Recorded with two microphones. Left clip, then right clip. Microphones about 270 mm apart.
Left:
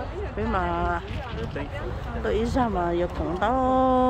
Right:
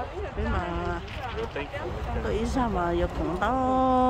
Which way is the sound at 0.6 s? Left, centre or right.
Centre.